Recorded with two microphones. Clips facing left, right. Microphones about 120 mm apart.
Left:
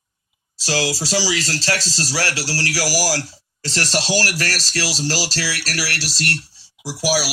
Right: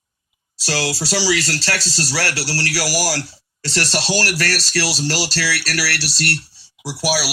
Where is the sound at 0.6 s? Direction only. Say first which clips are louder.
Left 1 dB; 15° left (ahead or behind).